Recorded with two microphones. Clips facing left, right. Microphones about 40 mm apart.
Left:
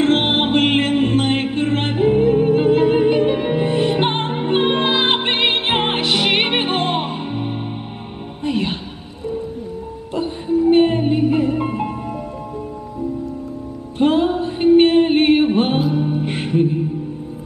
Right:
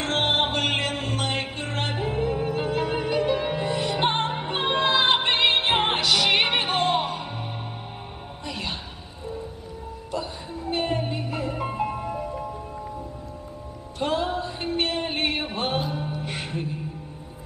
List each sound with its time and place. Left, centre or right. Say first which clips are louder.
0.0 s music: left 7 dB; left
10.1 s music: left 13 dB; left
11.9 s music: left 3 dB; centre
13.9 s music: left 9 dB; left
15.8 s music: left 11 dB; centre
16.1 s music: left 11 dB; left